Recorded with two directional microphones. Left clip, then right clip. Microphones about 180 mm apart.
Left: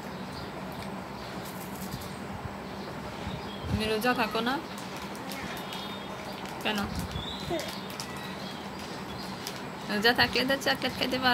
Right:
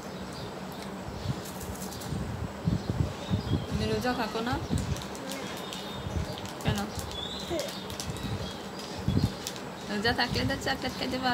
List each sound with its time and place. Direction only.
3.8 s speech: 15° left (ahead or behind)
9.9 s speech: 20° left (ahead or behind)